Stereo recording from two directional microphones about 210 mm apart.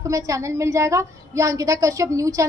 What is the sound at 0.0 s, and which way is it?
A woman's voice, 15° right (ahead or behind).